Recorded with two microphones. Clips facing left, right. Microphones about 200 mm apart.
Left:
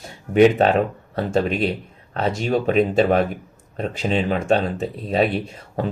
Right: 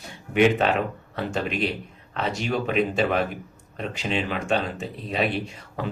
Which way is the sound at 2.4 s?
40° left (ahead or behind).